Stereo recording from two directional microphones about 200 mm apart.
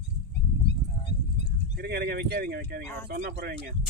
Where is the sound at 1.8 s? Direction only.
50° right (ahead or behind).